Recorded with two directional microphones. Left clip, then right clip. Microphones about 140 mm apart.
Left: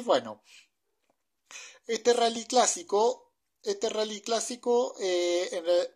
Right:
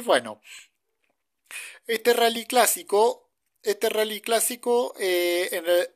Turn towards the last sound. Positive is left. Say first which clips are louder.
# right 4 dB
turn(degrees=-20)  # may be behind; listen again after turning